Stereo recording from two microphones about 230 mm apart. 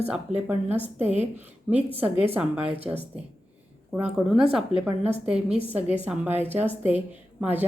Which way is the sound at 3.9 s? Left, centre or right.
Centre.